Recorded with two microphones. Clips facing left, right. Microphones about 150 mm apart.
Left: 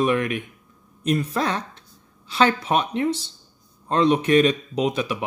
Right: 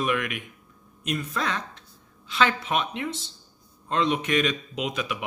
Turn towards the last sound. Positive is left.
turn(degrees=35)  # may be behind; listen again after turning